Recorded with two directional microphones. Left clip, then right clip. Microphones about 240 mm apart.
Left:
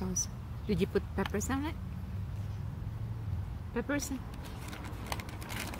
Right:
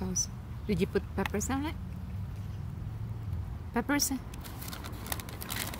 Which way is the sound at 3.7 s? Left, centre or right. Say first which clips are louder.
Right 4 dB; right.